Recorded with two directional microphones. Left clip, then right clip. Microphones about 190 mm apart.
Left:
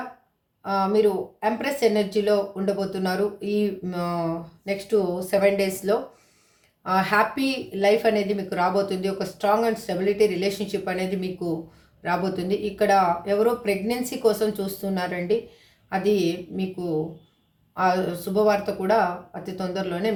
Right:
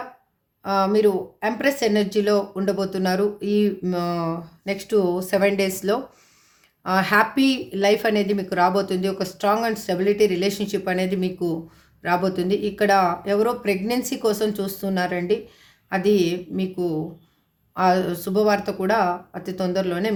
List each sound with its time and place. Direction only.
0.6 s speech: 45° right (ahead or behind)